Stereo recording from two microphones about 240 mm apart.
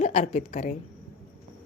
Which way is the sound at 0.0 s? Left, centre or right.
Left.